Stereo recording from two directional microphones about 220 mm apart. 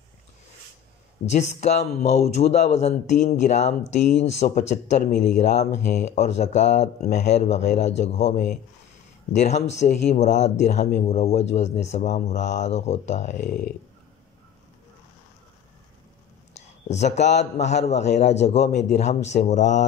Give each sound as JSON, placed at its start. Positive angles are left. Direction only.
{"t": 1.2, "sound": "speech", "side_deg": 30}
{"t": 16.5, "sound": "a sound", "side_deg": 30}
{"t": 17.4, "sound": "speech", "side_deg": 30}